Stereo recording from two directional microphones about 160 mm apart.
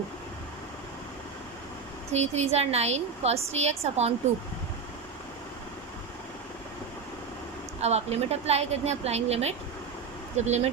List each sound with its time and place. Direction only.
2.1 s a woman's voice: 45° right (ahead or behind)
7.8 s a woman's voice: 40° right (ahead or behind)